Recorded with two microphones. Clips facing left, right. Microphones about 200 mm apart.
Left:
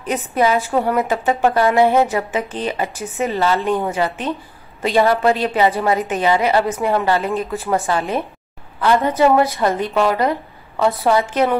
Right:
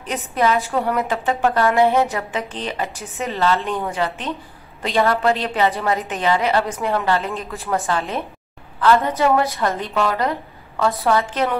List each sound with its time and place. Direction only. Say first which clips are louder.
0.0 s a woman's voice: left 3 dB; 5° left (ahead or behind)